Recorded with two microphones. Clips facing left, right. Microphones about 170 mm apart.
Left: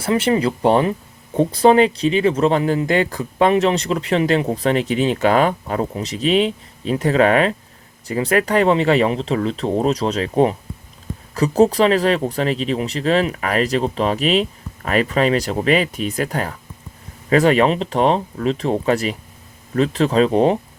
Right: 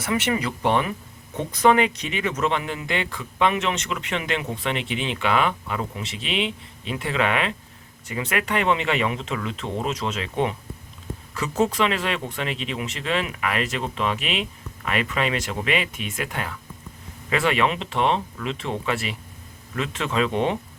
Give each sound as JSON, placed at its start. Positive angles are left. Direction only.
{"t": 0.0, "sound": "speech", "side_deg": 30}